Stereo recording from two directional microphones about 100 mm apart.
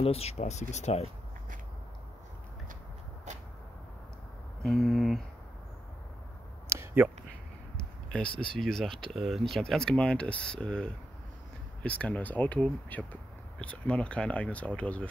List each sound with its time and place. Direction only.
0.0 s speech: 90° left
4.6 s speech: centre (ahead or behind)
6.7 s a sound: 25° right (ahead or behind)
8.4 s speech: 5° left (ahead or behind)